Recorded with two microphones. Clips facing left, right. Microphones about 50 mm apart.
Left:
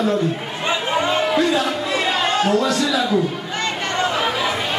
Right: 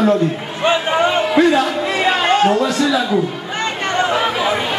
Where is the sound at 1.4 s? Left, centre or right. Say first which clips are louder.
Right 5 dB; right.